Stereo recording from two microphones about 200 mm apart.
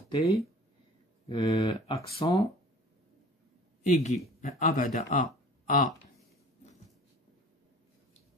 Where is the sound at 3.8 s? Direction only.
35° left (ahead or behind).